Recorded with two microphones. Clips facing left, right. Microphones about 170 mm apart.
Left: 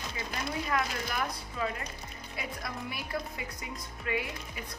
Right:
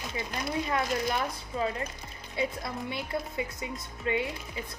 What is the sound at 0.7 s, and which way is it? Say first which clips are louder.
A woman's voice: right 4 dB; 25° right (ahead or behind).